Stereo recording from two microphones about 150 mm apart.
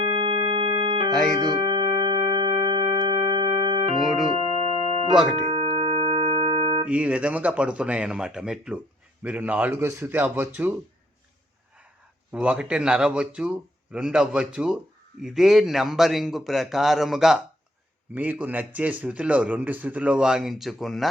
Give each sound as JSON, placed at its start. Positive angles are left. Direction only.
{"t": 0.0, "sound": "organ", "side_deg": -35}
{"t": 1.4, "sound": "music", "side_deg": -30}
{"t": 4.0, "sound": "a man's voice", "side_deg": 0}
{"t": 4.6, "sound": "music", "side_deg": -40}
{"t": 6.8, "sound": "a man's voice", "side_deg": -10}
{"t": 12.3, "sound": "a man's voice", "side_deg": -10}